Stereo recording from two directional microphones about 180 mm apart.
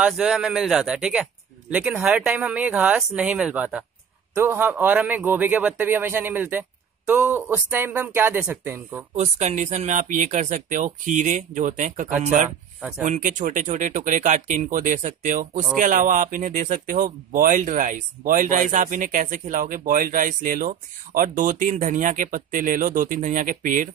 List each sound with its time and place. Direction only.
0.0 s a man's voice: 5° right (ahead or behind)
9.1 s speech: 40° right (ahead or behind)
12.4 s speech: 10° right (ahead or behind)
13.0 s speech: 45° right (ahead or behind)